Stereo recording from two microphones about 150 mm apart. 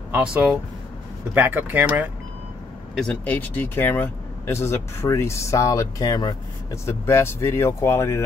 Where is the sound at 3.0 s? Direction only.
10° left (ahead or behind).